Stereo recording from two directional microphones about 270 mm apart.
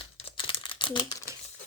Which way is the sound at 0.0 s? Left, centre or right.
Left.